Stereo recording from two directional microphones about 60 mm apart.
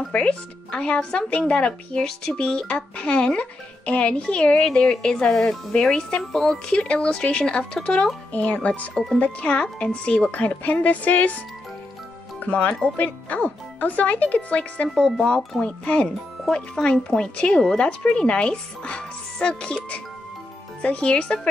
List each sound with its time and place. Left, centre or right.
0.1 s speech: centre
4.6 s speech: centre; by 8.9 s left
8.9 s speech: centre
9.2 s speech: centre
10.3 s speech: left